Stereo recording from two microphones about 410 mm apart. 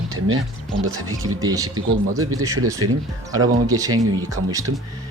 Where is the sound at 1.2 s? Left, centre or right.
Centre.